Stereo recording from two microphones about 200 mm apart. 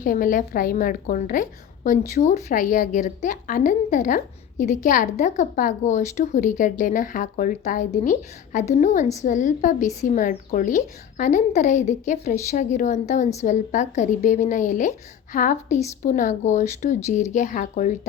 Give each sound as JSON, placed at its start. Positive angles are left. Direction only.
{"t": 0.0, "sound": "a woman's voice", "side_deg": 45}